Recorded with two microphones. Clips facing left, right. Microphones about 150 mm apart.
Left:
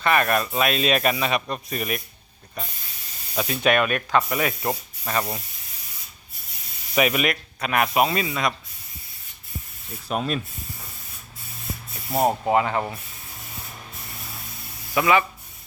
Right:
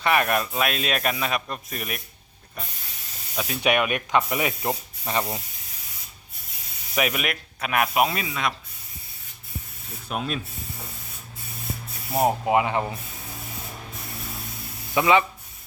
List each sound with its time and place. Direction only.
0.0 s speech: 10° right (ahead or behind)
3.3 s speech: centre (ahead or behind)
3.6 s speech: 15° right (ahead or behind)
6.9 s speech: centre (ahead or behind)
10.1 s speech: centre (ahead or behind)
12.1 s speech: 5° right (ahead or behind)
12.5 s speech: 15° right (ahead or behind)
14.9 s speech: 20° right (ahead or behind)